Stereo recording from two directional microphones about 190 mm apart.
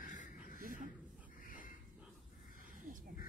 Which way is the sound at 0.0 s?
45° left (ahead or behind).